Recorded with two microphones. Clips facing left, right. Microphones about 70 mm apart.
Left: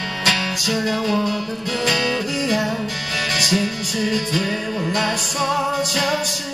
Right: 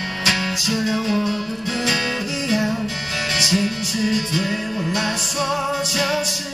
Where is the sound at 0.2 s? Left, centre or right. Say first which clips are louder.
Left 1 dB; left.